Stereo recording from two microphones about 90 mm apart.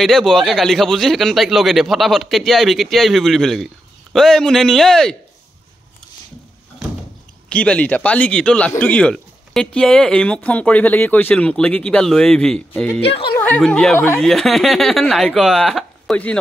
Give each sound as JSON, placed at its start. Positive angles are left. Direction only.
{"t": 0.0, "sound": "speech", "side_deg": 5}
{"t": 7.4, "sound": "speech", "side_deg": 15}
{"t": 13.0, "sound": "speech", "side_deg": 90}
{"t": 13.6, "sound": "speech", "side_deg": 5}
{"t": 13.9, "sound": "speech", "side_deg": 25}
{"t": 14.2, "sound": "speech", "side_deg": 5}